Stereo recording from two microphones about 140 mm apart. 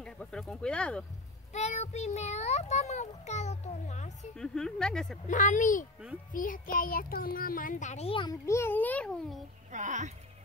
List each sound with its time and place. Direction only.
0.0 s speech: 5° left (ahead or behind)
1.5 s a child's voice: 55° left (ahead or behind)
4.4 s speech: 5° left (ahead or behind)
5.3 s speech: 65° left (ahead or behind)
6.3 s a child's voice: 75° left (ahead or behind); by 8.1 s 55° left (ahead or behind)
8.1 s a child's voice: 35° left (ahead or behind)
8.5 s a child's voice: 15° left (ahead or behind)
9.7 s speech: 60° right (ahead or behind)